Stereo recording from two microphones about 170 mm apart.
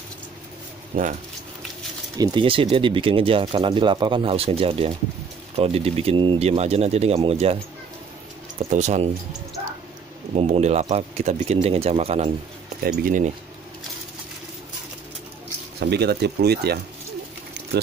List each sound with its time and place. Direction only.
0.9 s speech: 50° right (ahead or behind)
2.1 s speech: 25° right (ahead or behind)
8.5 s speech: 40° right (ahead or behind)
10.3 s speech: 35° right (ahead or behind)
13.0 s speech: 50° right (ahead or behind)
15.8 s speech: 75° right (ahead or behind)
17.6 s a sound: 90° right